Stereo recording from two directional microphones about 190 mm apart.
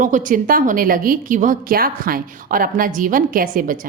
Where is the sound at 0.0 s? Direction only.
45° right (ahead or behind).